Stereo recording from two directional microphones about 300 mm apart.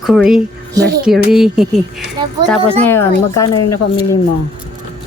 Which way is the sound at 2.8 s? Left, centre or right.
Centre.